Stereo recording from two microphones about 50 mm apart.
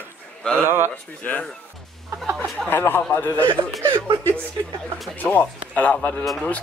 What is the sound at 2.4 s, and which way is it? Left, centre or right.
Speech, left.